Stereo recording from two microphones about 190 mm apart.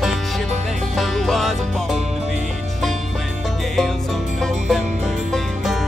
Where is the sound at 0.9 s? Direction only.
Centre (ahead or behind).